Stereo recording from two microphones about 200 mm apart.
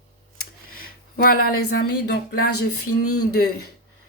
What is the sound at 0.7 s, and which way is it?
Speech, 45° left (ahead or behind).